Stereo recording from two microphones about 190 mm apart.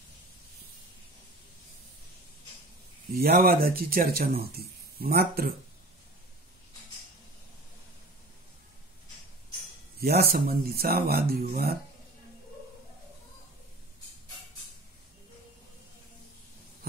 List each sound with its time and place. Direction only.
3.2 s speech: 50° right (ahead or behind)
9.9 s speech: 55° right (ahead or behind)